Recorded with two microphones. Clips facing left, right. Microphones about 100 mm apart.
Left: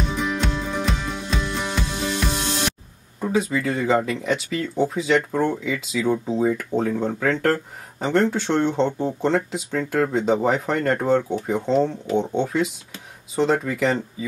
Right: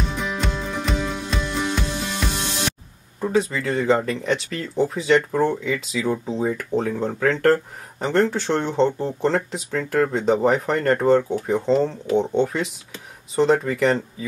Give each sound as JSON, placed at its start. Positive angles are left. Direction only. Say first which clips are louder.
{"t": 0.1, "sound": "music", "louder": "left 2 dB", "side_deg": 0}
{"t": 3.2, "sound": "speech", "louder": "right 1 dB", "side_deg": 0}